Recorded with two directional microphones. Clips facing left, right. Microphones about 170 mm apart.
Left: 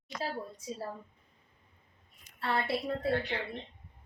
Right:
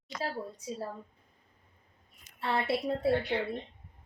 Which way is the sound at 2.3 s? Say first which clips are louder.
Right 2 dB; 20° right (ahead or behind).